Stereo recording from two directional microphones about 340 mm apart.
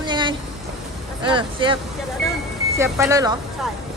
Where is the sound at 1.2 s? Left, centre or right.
Centre.